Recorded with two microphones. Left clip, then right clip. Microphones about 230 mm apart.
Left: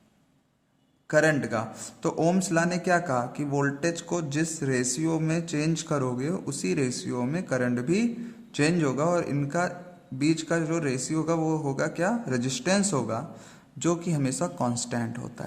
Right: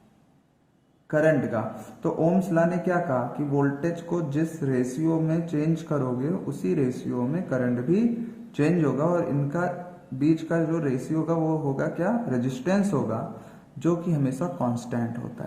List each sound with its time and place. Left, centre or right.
1.1 s a man's voice: left